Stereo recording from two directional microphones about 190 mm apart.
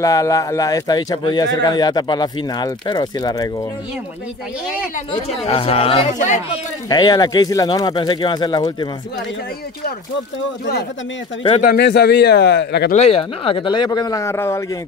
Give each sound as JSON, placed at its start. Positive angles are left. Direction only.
{"t": 0.0, "sound": "speech", "side_deg": 15}
{"t": 5.1, "sound": "speech", "side_deg": 30}
{"t": 6.9, "sound": "speech", "side_deg": 20}
{"t": 11.6, "sound": "a man's voice", "side_deg": 55}
{"t": 12.9, "sound": "speech", "side_deg": 30}